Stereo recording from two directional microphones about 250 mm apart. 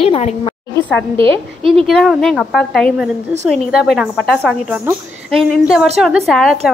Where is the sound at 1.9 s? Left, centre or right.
Centre.